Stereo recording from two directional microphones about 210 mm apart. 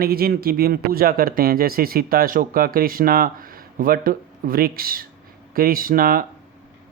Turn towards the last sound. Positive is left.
turn(degrees=-45)  # may be behind; listen again after turning